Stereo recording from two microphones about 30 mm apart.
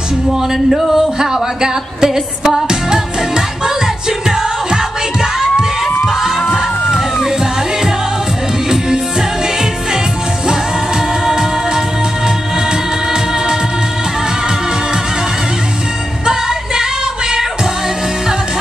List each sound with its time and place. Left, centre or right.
0.3 s music: centre
1.2 s a woman's voice: right
2.7 s music: right
4.6 s crowd: right
6.5 s music: centre
8.6 s music: right
11.2 s music: centre
16.3 s music: centre